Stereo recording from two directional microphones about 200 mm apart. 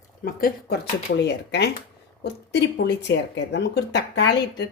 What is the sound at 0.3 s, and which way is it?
A woman's voice, 45° left (ahead or behind).